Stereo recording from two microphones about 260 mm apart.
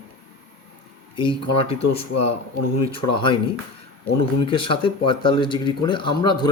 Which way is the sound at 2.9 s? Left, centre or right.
Centre.